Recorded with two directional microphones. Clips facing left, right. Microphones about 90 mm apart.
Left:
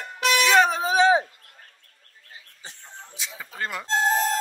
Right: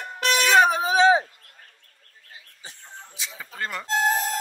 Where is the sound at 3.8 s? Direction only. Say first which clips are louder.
Even; 35° left (ahead or behind).